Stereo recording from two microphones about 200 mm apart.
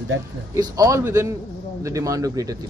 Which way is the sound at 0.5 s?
15° right (ahead or behind).